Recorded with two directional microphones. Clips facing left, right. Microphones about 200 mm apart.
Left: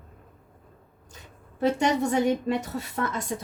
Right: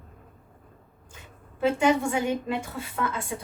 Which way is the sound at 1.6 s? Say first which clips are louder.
Right 1 dB; 40° left (ahead or behind).